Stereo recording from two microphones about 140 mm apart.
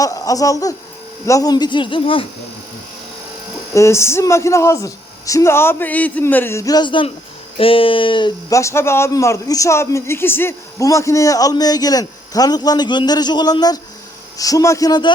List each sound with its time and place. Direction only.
0.0 s a man's voice: 25° left (ahead or behind)
3.8 s a man's voice: 20° left (ahead or behind); by 8.3 s 35° left (ahead or behind)
8.4 s a man's voice: 20° left (ahead or behind)